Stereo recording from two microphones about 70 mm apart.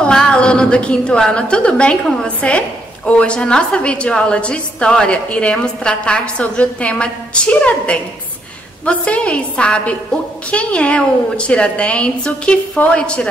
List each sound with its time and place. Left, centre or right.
0.0 s a woman's voice: centre